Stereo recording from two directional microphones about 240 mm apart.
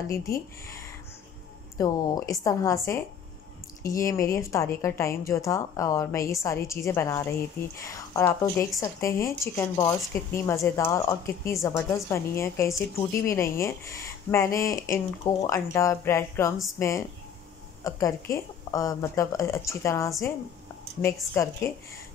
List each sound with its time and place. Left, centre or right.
1.8 s a woman's voice: centre
16.5 s speech: centre
17.8 s a woman's voice: centre